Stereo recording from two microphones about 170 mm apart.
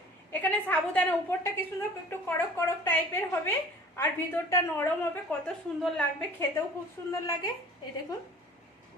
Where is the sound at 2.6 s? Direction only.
15° left (ahead or behind).